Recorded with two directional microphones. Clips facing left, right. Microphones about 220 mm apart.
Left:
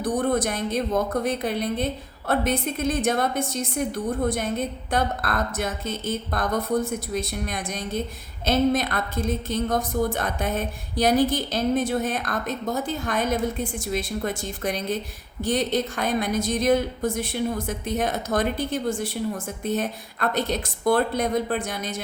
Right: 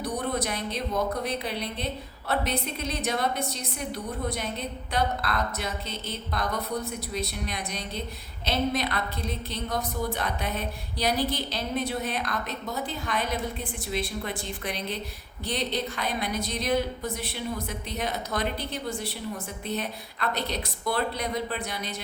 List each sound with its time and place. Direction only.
0.0 s a woman's voice: 50° left (ahead or behind)